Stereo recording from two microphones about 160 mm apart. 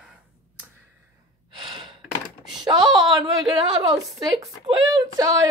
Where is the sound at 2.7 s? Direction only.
25° right (ahead or behind).